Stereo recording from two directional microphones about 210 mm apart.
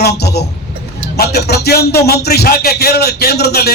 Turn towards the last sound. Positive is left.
turn(degrees=50)  # may be behind; listen again after turning